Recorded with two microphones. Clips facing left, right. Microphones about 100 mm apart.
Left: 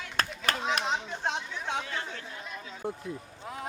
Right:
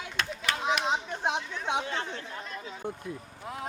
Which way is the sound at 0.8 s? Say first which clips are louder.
Right 2 dB; 15° right (ahead or behind).